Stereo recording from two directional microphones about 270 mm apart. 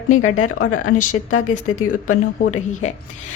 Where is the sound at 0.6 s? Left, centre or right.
Left.